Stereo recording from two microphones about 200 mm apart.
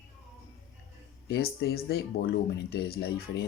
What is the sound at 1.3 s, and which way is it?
Speech, 50° left (ahead or behind).